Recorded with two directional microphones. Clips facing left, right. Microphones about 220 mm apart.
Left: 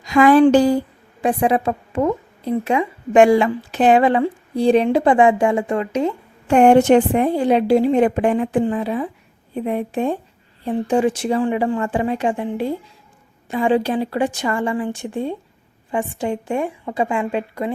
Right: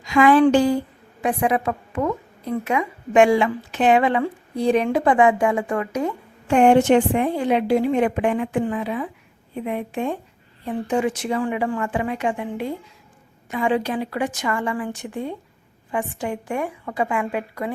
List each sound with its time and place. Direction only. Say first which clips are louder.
0.0 s a woman's voice: left 3 dB; 40° left (ahead or behind)
6.5 s a woman's voice: left 3 dB; 40° left (ahead or behind); by 17.7 s 25° left (ahead or behind)